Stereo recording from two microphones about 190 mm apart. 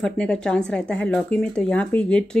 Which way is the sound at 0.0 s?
5° left (ahead or behind).